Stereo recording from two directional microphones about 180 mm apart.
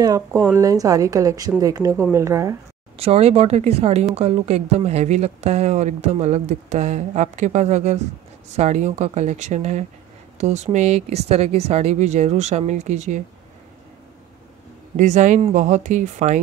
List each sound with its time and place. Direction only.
0.0 s a woman's voice: 20° right (ahead or behind)
3.0 s speech: 35° right (ahead or behind)
15.0 s speech: 40° right (ahead or behind)